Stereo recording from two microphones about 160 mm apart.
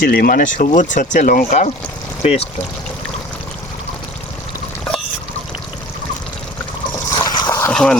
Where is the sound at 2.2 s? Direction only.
40° left (ahead or behind).